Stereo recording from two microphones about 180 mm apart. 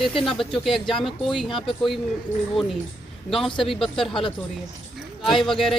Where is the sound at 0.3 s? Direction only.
Centre (ahead or behind).